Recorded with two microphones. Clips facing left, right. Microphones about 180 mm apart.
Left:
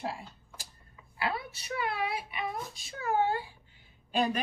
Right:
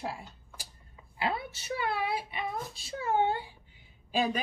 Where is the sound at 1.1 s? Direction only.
25° right (ahead or behind).